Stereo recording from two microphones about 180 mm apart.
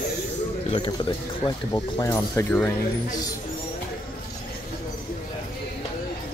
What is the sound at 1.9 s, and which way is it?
Speech, 15° left (ahead or behind).